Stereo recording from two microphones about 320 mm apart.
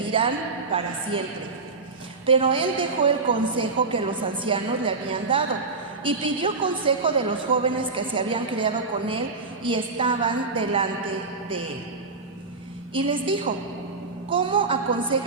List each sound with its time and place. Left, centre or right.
0.0 s a woman's voice: centre
2.2 s a woman's voice: centre
12.9 s a woman's voice: centre